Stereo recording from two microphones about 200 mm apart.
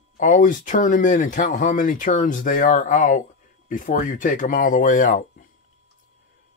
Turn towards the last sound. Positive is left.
turn(degrees=40)  # may be behind; listen again after turning